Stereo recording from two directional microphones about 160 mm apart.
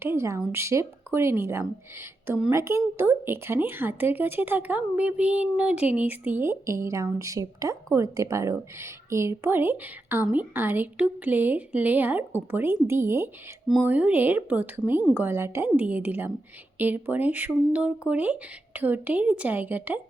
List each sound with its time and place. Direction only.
0.0 s speech: 15° right (ahead or behind)